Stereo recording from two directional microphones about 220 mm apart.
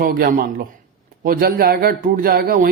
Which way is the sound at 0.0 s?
40° right (ahead or behind).